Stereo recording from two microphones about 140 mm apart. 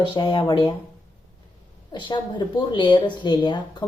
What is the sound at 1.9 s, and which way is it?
A woman's voice, 35° left (ahead or behind).